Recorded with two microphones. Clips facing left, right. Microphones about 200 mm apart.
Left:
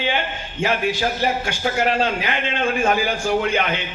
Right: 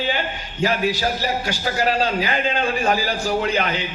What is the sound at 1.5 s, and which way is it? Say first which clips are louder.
A man's voice: left 1 dB; 35° right (ahead or behind).